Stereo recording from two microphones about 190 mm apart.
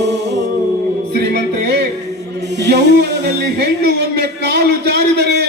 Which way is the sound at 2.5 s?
65° right (ahead or behind).